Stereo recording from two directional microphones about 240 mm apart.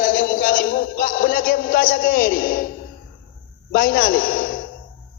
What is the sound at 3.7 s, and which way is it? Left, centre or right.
Speech, left.